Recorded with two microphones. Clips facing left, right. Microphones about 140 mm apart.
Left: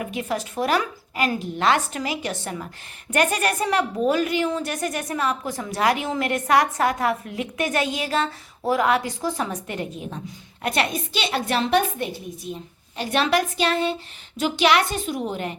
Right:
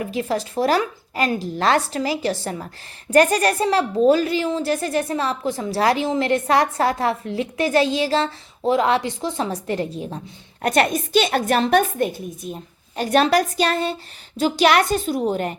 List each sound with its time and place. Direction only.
0.0 s a woman's voice: 35° right (ahead or behind)